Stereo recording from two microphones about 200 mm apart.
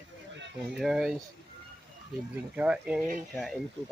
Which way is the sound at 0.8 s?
5° right (ahead or behind).